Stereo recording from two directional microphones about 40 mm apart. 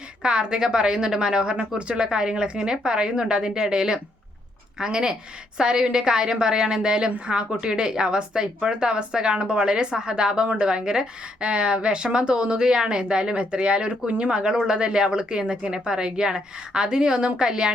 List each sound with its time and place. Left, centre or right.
0.2 s a woman's voice: right